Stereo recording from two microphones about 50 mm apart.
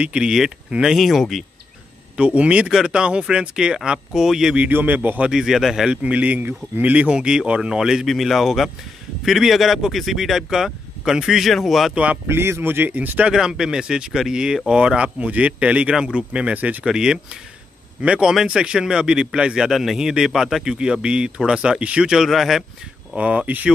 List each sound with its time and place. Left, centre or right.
0.0 s speech: right
0.9 s speech: centre
2.1 s a man's voice: right
4.7 s a man's voice: right
5.3 s a man's voice: centre
6.0 s speech: right; by 11.9 s centre
11.9 s speech: right
12.3 s speech: right
13.3 s a man's voice: centre; by 16.8 s right
16.8 s a man's voice: centre
18.3 s a man's voice: centre
20.6 s a man's voice: centre
22.1 s speech: centre
23.1 s speech: right